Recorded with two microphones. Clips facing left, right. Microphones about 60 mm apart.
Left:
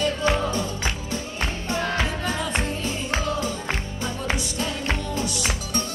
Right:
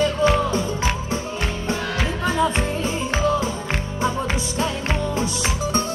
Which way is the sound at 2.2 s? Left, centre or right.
Right.